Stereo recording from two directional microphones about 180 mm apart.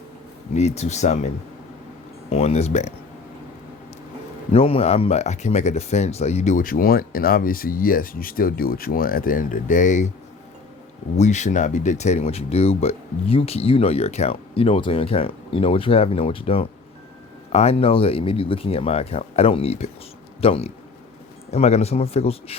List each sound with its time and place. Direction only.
0.5 s speech: 35° left (ahead or behind)
2.3 s speech: 35° left (ahead or behind)
4.5 s speech: 30° left (ahead or behind)
11.2 s speech: 40° left (ahead or behind)